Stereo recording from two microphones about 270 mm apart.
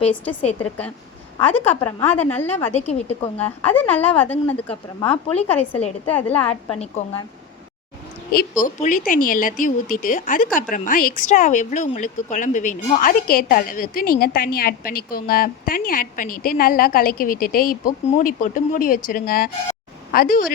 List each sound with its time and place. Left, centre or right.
0.6 s a woman's voice: centre
2.7 s speech: left
3.3 s a woman's voice: centre
6.7 s speech: left
8.6 s a woman's voice: left